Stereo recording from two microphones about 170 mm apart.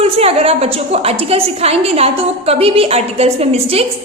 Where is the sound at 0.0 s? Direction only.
35° right (ahead or behind).